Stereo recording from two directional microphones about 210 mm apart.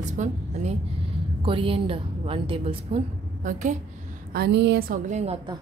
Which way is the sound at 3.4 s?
40° right (ahead or behind).